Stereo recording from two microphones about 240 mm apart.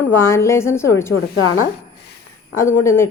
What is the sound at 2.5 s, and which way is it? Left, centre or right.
Speech, centre.